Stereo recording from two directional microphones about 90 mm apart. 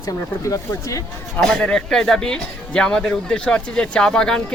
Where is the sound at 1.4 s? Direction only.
5° left (ahead or behind).